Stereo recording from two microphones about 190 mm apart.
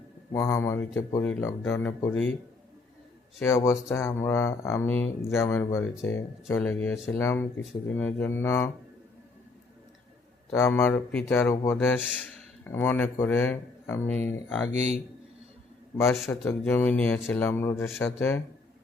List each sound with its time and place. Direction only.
0.3 s speech: 15° left (ahead or behind)
3.4 s speech: 15° left (ahead or behind)
10.5 s speech: 15° left (ahead or behind)
14.7 s speech: 35° right (ahead or behind)
16.2 s speech: 10° left (ahead or behind)